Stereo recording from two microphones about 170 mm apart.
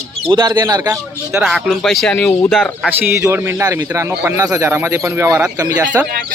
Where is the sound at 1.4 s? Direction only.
Centre (ahead or behind).